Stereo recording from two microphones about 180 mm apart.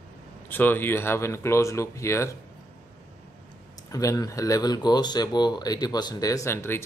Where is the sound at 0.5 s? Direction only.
10° left (ahead or behind).